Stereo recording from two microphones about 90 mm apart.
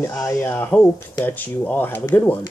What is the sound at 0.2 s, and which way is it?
Speech, 25° left (ahead or behind).